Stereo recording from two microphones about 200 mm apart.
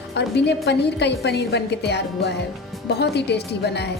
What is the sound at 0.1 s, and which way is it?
A woman's voice, 55° left (ahead or behind).